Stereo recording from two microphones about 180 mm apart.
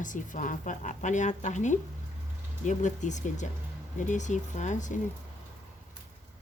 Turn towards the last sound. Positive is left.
turn(degrees=45)  # may be behind; listen again after turning